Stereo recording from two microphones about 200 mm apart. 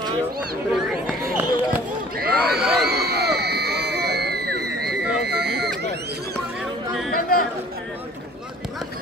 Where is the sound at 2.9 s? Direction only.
55° right (ahead or behind).